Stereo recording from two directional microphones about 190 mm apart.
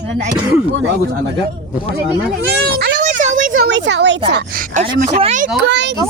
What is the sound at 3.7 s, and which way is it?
Speech, 70° right (ahead or behind).